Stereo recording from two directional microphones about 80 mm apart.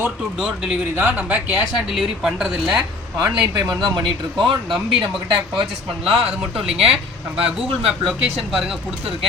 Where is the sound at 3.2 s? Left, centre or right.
Right.